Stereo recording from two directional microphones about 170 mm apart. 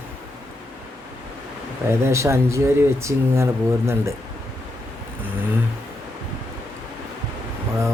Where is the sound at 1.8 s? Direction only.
15° right (ahead or behind).